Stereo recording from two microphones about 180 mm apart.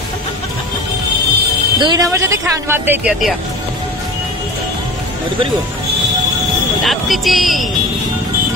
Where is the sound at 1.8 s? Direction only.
20° right (ahead or behind); by 3.3 s 5° right (ahead or behind).